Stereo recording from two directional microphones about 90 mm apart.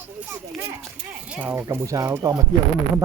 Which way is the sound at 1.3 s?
20° right (ahead or behind).